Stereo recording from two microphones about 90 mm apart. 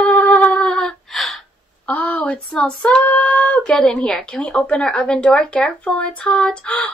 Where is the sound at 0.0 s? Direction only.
20° left (ahead or behind).